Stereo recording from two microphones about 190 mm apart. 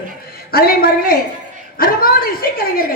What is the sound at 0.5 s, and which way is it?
A woman's voice, 50° left (ahead or behind).